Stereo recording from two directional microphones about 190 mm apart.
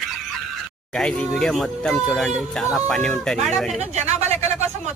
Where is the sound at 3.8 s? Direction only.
35° right (ahead or behind).